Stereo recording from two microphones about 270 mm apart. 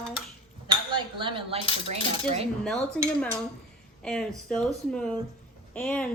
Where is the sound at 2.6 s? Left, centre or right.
Centre.